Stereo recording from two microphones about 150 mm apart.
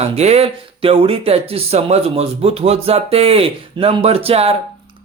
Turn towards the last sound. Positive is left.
turn(degrees=-40)  # may be behind; listen again after turning